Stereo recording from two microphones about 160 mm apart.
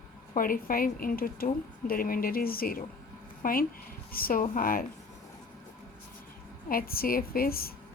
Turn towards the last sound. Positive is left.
turn(degrees=70)  # may be behind; listen again after turning